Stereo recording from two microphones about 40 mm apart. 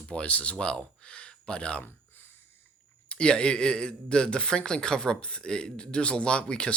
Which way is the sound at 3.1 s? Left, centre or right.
Left.